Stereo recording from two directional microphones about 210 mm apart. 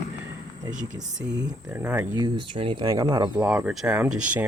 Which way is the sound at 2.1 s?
20° right (ahead or behind).